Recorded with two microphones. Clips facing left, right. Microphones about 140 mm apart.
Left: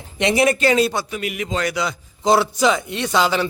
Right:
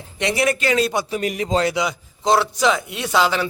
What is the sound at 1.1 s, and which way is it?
Speech, 35° right (ahead or behind).